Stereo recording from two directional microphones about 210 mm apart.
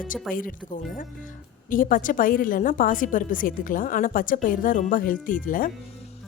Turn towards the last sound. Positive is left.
turn(degrees=40)  # may be behind; listen again after turning